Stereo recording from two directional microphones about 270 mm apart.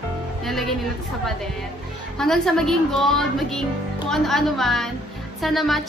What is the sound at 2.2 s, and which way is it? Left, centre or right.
Music, centre.